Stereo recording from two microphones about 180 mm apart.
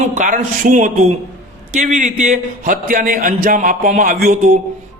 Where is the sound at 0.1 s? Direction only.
45° right (ahead or behind).